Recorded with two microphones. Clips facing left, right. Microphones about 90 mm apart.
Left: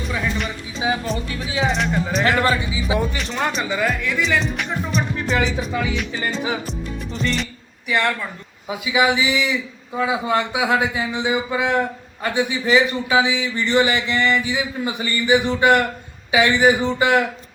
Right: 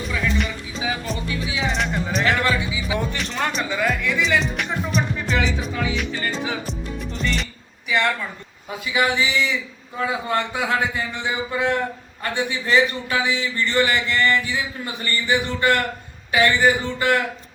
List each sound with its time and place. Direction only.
0.9 s music: 35° left (ahead or behind)
1.6 s music: centre (ahead or behind)
2.4 s speech: 35° left (ahead or behind)
3.0 s speech: centre (ahead or behind)
6.7 s music: centre (ahead or behind)
7.9 s speech: centre (ahead or behind); by 17.2 s 15° left (ahead or behind)